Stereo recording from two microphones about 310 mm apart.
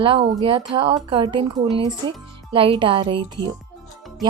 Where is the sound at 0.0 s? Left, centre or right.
Centre.